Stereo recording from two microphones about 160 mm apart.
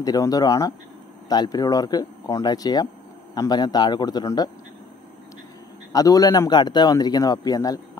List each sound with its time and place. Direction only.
0.0 s a man's voice: 25° left (ahead or behind)
5.9 s a man's voice: 20° left (ahead or behind)